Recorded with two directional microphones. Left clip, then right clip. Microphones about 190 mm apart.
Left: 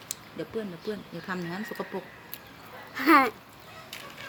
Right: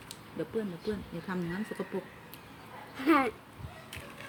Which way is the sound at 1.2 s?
20° right (ahead or behind).